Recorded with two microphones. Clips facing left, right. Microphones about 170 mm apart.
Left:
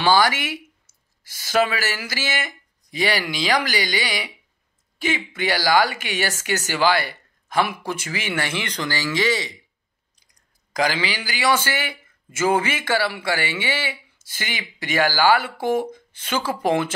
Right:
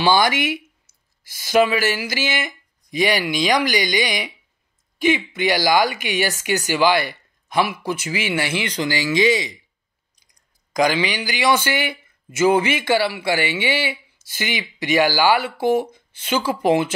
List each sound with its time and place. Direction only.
0.0 s a woman's voice: 15° right (ahead or behind)
10.8 s a woman's voice: 15° right (ahead or behind)